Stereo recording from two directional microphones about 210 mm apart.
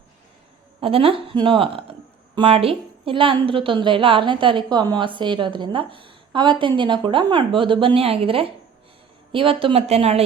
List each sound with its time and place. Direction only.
0.8 s speech: 25° right (ahead or behind)